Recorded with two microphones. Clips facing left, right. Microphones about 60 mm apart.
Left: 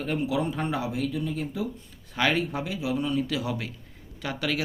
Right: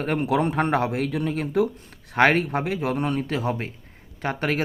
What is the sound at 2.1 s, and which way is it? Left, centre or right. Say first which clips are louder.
A man's voice: right 6 dB; right.